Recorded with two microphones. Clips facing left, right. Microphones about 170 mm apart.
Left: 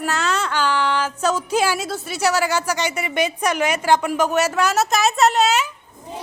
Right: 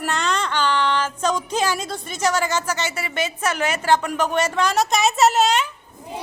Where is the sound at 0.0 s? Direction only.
5° left (ahead or behind).